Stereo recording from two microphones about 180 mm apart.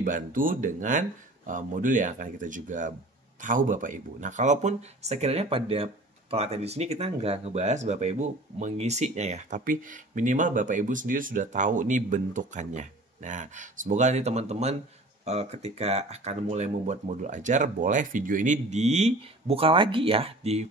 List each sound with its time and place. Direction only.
0.0 s speech: 50° right (ahead or behind)